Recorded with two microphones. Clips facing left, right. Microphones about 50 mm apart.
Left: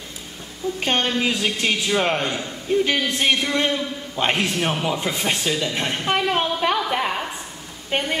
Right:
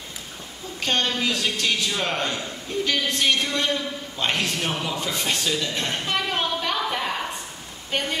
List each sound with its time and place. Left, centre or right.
0.7 s a man's voice: left